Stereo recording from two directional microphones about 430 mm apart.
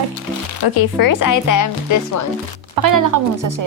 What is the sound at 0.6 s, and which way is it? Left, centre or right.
Speech, left.